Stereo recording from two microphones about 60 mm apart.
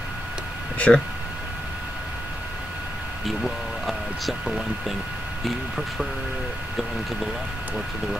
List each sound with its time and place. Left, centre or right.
0.7 s speech: left
3.3 s speech: centre